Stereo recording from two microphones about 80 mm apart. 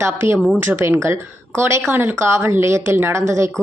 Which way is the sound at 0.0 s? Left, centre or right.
Right.